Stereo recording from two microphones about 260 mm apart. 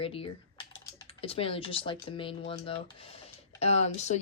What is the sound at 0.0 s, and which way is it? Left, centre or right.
Speech, left.